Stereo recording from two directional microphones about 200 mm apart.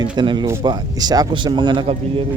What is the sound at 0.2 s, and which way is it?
Speech, 20° right (ahead or behind).